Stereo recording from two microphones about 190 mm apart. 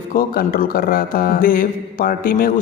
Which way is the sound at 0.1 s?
50° left (ahead or behind).